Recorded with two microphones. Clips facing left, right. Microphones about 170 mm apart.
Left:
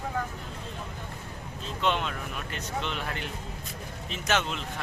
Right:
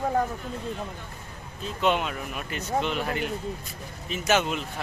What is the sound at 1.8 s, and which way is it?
A man's voice, 10° right (ahead or behind).